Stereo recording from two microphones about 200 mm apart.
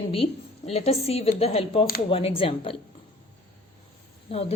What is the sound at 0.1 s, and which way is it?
A woman's voice, 30° left (ahead or behind).